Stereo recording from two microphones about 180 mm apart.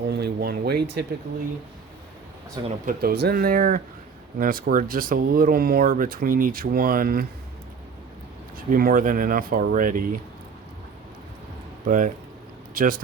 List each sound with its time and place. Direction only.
0.1 s speech: 65° right (ahead or behind)
2.8 s speech: 60° right (ahead or behind)
8.5 s speech: 50° right (ahead or behind)
11.9 s speech: 45° right (ahead or behind)